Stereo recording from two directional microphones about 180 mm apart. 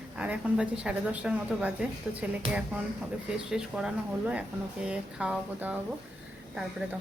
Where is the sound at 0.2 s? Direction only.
5° right (ahead or behind).